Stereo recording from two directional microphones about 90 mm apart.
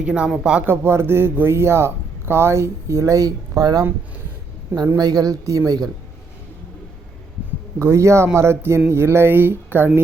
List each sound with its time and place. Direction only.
0.0 s speech: 10° right (ahead or behind)
0.6 s a man's voice: 25° right (ahead or behind); by 3.8 s 45° right (ahead or behind)
4.9 s a woman's voice: 45° right (ahead or behind)
7.8 s a man's voice: 30° right (ahead or behind)